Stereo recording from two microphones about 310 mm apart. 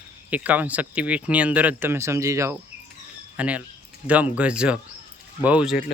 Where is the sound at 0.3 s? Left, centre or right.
Centre.